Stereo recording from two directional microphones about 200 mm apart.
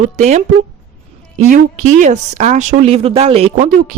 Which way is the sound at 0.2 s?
35° right (ahead or behind).